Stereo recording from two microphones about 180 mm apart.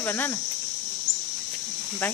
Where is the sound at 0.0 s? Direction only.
10° left (ahead or behind).